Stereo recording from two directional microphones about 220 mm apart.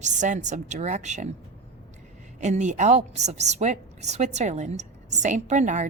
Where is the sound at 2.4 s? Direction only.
30° right (ahead or behind).